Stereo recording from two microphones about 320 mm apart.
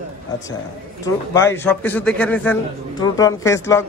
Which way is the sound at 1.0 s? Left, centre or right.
Centre.